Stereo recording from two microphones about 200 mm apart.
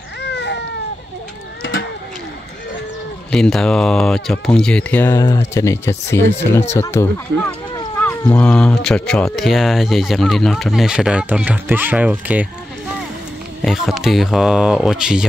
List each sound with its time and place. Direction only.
0.2 s baby cry: 60° left (ahead or behind)
1.6 s a sound: 65° left (ahead or behind)
3.3 s speech: 5° left (ahead or behind)
8.3 s speech: 5° left (ahead or behind)